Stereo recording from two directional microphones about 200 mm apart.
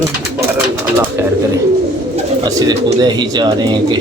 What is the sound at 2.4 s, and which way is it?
Speech, 20° right (ahead or behind).